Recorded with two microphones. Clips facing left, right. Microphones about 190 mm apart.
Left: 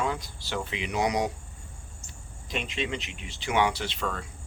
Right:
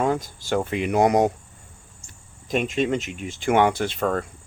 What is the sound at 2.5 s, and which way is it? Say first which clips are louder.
Speech: right 10 dB; 45° right (ahead or behind).